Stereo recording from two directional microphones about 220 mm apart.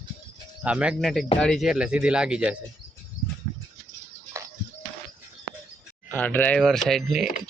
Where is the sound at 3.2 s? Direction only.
40° left (ahead or behind).